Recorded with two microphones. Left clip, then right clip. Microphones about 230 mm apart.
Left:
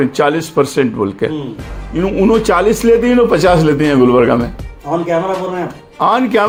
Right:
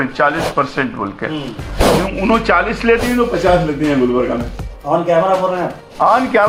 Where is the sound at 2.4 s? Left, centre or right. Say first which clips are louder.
Left 2 dB; left.